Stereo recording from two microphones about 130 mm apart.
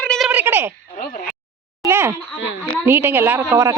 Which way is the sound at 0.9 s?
90° left.